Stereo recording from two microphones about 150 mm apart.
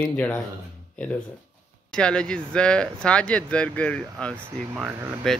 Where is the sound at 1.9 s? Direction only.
5° left (ahead or behind).